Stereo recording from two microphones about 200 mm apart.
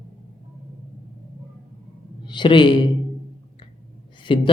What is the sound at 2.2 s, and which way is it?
Speech, 25° left (ahead or behind).